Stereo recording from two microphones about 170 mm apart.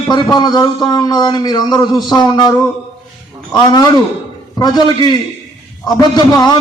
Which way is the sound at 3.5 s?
25° left (ahead or behind).